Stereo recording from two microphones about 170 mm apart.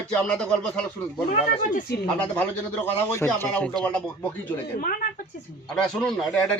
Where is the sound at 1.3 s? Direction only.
50° left (ahead or behind).